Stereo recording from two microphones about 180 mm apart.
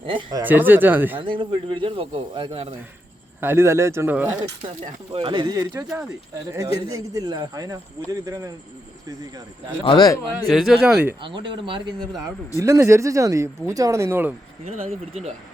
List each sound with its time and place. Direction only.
0.0 s speech: 30° right (ahead or behind)
0.4 s speech: 10° right (ahead or behind)
1.2 s speech: 30° right (ahead or behind)
3.4 s speech: 15° right (ahead or behind)
5.1 s speech: 30° right (ahead or behind)
9.8 s speech: 25° left (ahead or behind)
10.5 s speech: centre (ahead or behind)
11.2 s speech: 25° right (ahead or behind)
12.5 s speech: 15° right (ahead or behind)
14.8 s speech: 35° right (ahead or behind)